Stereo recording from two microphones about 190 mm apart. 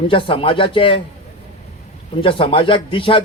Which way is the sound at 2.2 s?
30° left (ahead or behind).